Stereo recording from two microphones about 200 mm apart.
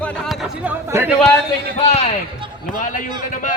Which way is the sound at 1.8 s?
30° left (ahead or behind).